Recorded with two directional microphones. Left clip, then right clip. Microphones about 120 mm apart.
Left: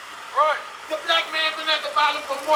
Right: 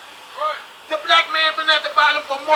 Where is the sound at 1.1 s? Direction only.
30° right (ahead or behind).